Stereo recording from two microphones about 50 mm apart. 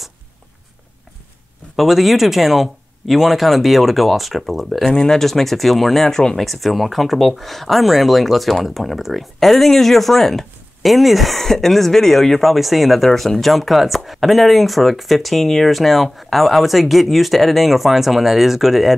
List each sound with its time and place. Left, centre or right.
1.8 s speech: centre
4.9 s speech: centre